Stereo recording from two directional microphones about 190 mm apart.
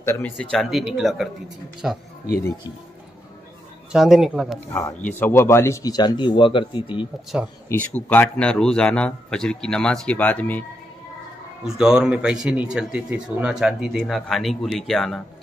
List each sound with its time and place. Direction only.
0.0 s a man's voice: 10° left (ahead or behind)
3.9 s a man's voice: centre (ahead or behind)
4.7 s a man's voice: 10° left (ahead or behind); by 7.1 s 25° left (ahead or behind)
7.3 s a man's voice: 5° right (ahead or behind)
7.7 s a man's voice: 10° left (ahead or behind)
11.6 s a man's voice: 5° right (ahead or behind)